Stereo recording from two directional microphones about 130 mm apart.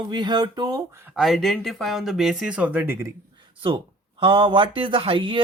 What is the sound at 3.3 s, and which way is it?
A man's voice, 40° right (ahead or behind).